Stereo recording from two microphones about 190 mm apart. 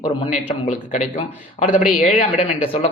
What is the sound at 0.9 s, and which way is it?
Speech, 40° left (ahead or behind).